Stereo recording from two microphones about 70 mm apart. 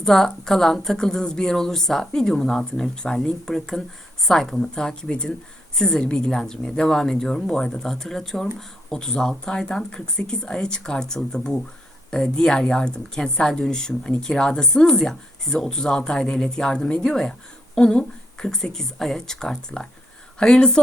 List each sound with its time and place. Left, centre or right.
0.0 s speech: centre